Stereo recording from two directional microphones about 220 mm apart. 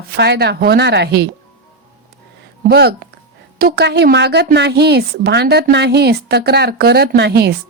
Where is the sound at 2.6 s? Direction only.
45° right (ahead or behind).